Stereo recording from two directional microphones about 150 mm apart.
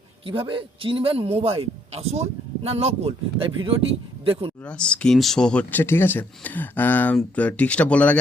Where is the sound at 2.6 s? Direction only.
40° right (ahead or behind).